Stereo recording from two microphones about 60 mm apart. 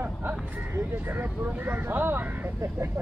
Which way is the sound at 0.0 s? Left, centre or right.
Right.